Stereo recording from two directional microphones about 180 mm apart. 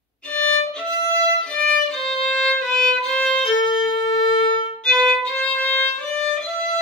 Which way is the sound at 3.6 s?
25° left (ahead or behind).